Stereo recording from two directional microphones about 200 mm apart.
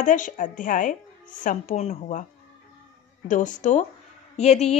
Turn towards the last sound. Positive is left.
turn(degrees=35)  # may be behind; listen again after turning